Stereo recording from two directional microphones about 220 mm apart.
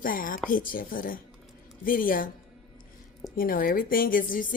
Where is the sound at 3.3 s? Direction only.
40° left (ahead or behind).